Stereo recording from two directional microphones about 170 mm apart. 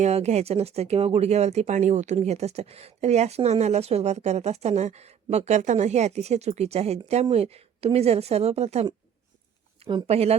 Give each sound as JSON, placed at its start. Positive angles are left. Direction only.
{"t": 0.0, "sound": "speech", "side_deg": -40}